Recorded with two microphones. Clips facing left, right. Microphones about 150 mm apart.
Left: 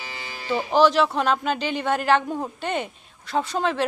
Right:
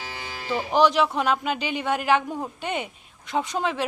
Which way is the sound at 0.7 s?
15° right (ahead or behind).